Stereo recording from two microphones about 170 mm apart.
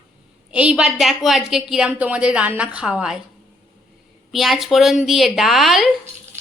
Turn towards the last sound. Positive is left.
turn(degrees=0)  # may be behind; listen again after turning